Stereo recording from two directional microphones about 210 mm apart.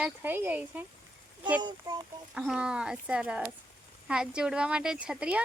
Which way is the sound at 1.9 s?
15° right (ahead or behind).